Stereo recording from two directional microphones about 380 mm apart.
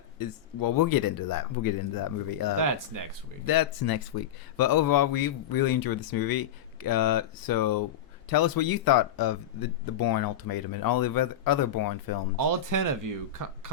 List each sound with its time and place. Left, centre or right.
0.2 s speech: left
2.6 s speech: right
3.4 s speech: left
12.4 s speech: right